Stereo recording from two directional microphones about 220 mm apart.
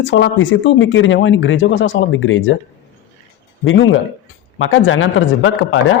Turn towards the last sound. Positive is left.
turn(degrees=65)  # may be behind; listen again after turning